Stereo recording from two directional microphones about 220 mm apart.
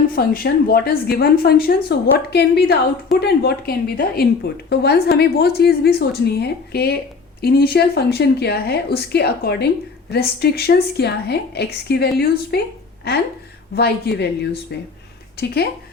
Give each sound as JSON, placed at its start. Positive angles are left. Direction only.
{"t": 0.2, "sound": "a woman's voice", "side_deg": 45}